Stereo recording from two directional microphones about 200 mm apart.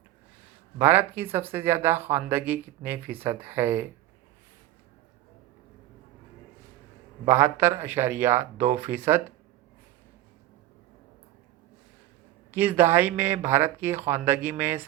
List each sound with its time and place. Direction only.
0.8 s speech: 10° right (ahead or behind)
7.3 s speech: 10° right (ahead or behind)
8.5 s speech: 35° right (ahead or behind)
8.8 s speech: 10° right (ahead or behind)
12.5 s speech: 10° right (ahead or behind)